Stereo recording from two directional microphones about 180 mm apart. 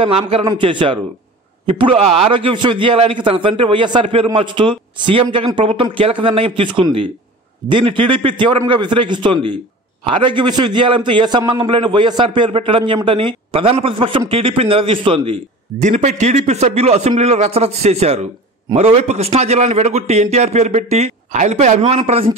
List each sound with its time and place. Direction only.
0.0 s a man's voice: 30° right (ahead or behind)
15.8 s a man's voice: 40° right (ahead or behind)